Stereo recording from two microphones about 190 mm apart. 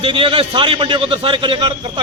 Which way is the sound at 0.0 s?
25° right (ahead or behind).